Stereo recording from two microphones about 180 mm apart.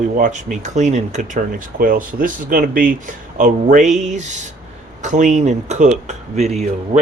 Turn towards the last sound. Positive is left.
turn(degrees=-40)  # may be behind; listen again after turning